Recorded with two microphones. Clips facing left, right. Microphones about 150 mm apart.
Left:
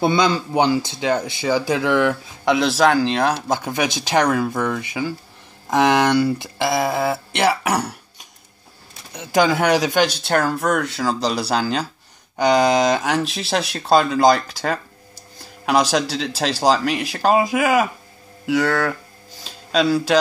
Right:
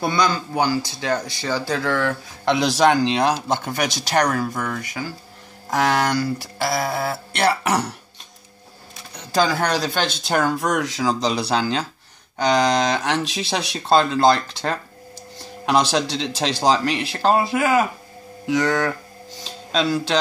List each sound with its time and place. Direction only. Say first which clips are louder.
0.0 s speech: left 3 dB; 20° left (ahead or behind)
2.5 s speech: left 1 dB; centre (ahead or behind)
9.1 s speech: left 3 dB; 20° left (ahead or behind)
19.4 s a sound: left 3 dB; 5° left (ahead or behind)